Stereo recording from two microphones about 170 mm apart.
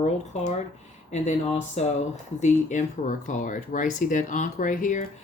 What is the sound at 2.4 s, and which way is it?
Speech, 45° left (ahead or behind).